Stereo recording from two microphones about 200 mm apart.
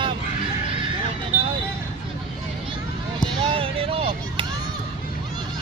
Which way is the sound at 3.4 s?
25° right (ahead or behind).